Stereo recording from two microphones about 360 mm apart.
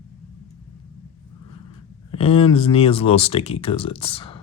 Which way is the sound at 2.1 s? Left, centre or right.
Centre.